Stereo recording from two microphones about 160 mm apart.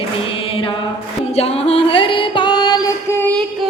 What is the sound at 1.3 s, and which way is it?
Music, 40° left (ahead or behind).